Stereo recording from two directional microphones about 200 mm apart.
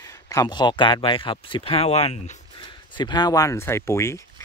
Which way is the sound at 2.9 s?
20° left (ahead or behind).